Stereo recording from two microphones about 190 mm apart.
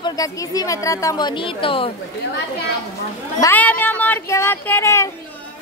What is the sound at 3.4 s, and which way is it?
Speech, 10° left (ahead or behind).